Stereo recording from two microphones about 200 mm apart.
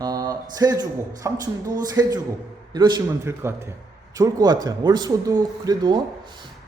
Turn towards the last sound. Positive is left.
turn(degrees=-20)  # may be behind; listen again after turning